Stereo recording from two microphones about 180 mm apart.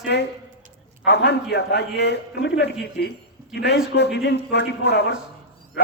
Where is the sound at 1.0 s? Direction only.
70° left (ahead or behind).